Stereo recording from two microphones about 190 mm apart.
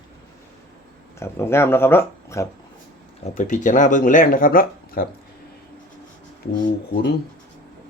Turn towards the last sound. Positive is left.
turn(degrees=40)  # may be behind; listen again after turning